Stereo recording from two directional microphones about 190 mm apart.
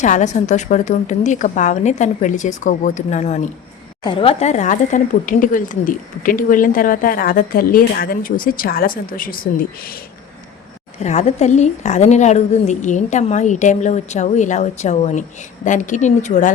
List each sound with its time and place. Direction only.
0.0 s a woman's voice: 40° left (ahead or behind)
4.0 s speech: 30° left (ahead or behind); by 9.9 s 50° left (ahead or behind)
11.0 s a woman's voice: 35° left (ahead or behind)